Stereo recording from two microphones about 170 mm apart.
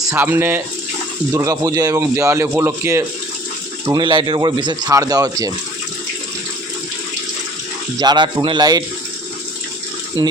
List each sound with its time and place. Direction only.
0.1 s speech: 15° right (ahead or behind)
3.8 s speech: 25° right (ahead or behind)
7.9 s speech: 25° right (ahead or behind)